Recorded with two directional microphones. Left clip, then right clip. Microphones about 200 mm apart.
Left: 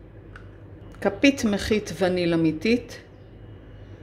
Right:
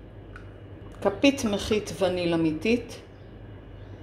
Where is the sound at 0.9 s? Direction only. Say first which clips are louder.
Left 2 dB; 20° left (ahead or behind).